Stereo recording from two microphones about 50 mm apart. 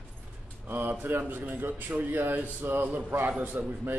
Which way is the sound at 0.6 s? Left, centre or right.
Right.